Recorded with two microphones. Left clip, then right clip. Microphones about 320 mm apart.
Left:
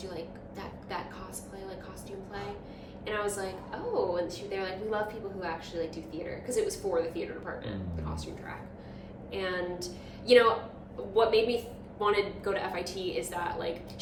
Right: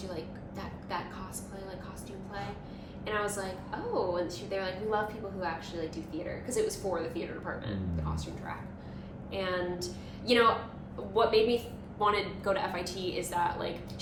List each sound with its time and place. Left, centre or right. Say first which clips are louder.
3.1 s a woman's voice: even; centre